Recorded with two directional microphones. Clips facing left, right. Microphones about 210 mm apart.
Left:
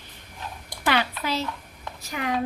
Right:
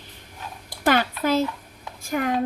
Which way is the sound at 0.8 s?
45° right (ahead or behind).